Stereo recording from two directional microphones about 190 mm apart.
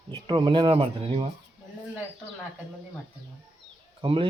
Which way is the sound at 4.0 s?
25° right (ahead or behind).